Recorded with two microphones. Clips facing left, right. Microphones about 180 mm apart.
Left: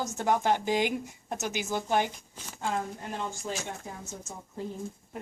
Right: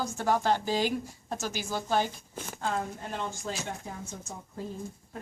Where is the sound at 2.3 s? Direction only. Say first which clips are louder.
Right 7 dB; 55° right (ahead or behind).